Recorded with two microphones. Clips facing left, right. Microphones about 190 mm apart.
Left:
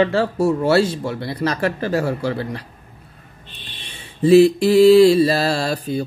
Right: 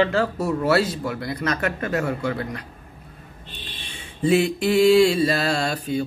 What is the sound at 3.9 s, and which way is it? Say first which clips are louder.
Mantra: left 8 dB; 35° left (ahead or behind).